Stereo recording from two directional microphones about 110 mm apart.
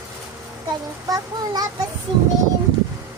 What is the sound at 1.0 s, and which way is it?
Child singing, 35° right (ahead or behind).